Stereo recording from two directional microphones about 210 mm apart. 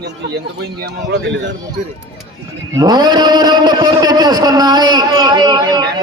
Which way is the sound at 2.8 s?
20° right (ahead or behind).